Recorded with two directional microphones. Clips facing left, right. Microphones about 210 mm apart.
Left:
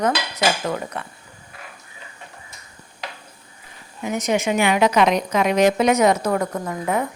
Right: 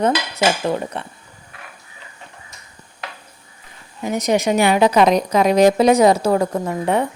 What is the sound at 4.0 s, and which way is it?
A woman's voice, 35° right (ahead or behind).